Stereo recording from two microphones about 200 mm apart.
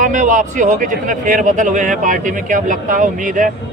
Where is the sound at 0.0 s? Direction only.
40° right (ahead or behind).